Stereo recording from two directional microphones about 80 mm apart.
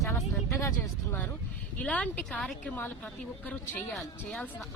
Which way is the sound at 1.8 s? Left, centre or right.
Centre.